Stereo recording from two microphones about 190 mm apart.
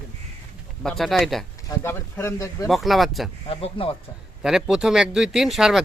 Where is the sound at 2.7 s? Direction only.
Centre (ahead or behind).